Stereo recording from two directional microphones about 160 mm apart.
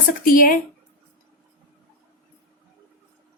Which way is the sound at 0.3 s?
60° left (ahead or behind).